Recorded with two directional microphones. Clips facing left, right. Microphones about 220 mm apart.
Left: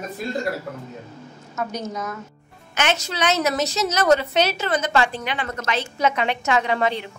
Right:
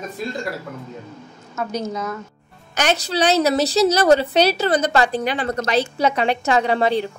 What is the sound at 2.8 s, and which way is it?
A woman's voice, 35° right (ahead or behind).